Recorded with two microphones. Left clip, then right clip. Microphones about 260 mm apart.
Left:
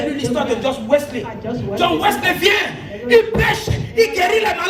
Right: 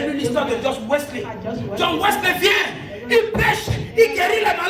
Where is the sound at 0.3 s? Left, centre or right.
Left.